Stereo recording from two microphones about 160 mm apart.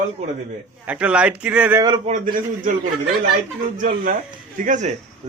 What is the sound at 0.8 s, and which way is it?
Speech, 10° right (ahead or behind).